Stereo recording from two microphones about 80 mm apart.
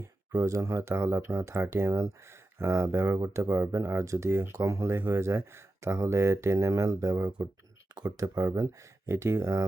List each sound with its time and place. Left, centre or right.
0.4 s speech: right
4.9 s speech: right
7.9 s speech: right
8.2 s speech: right
9.0 s speech: right